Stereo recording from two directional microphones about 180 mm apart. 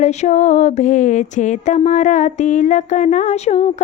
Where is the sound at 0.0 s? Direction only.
40° left (ahead or behind).